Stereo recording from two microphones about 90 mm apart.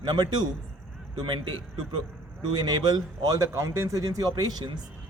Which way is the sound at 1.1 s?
65° right (ahead or behind).